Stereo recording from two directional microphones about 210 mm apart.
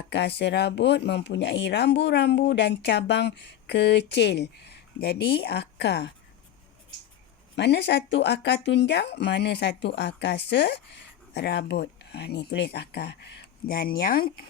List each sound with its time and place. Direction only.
0.1 s speech: 55° left (ahead or behind)
7.5 s speech: 55° left (ahead or behind)